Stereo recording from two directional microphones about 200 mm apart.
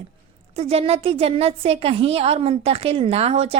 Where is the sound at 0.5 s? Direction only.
30° right (ahead or behind).